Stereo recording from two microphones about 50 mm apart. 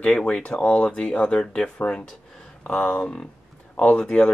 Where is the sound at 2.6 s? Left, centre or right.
Left.